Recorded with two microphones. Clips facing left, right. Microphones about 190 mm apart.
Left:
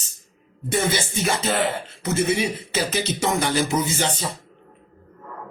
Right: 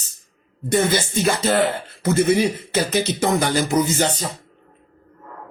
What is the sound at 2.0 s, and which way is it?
Speech, 50° right (ahead or behind).